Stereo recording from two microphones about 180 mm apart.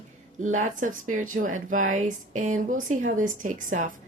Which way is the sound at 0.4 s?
40° right (ahead or behind).